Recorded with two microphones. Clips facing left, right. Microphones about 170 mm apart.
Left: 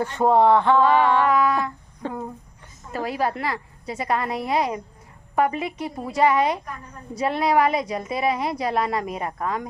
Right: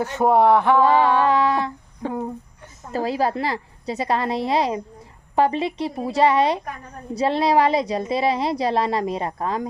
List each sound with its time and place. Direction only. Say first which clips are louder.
0.0 s speech: right 1 dB; 10° right (ahead or behind)
0.9 s a woman's voice: right 1 dB; 30° right (ahead or behind)
2.0 s a sound: right 4 dB; 15° right (ahead or behind)
2.9 s a woman's voice: right 3 dB; 30° right (ahead or behind)